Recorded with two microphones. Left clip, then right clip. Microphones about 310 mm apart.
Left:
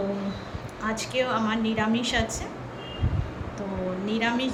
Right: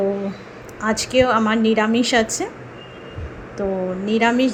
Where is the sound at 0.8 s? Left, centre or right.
Centre.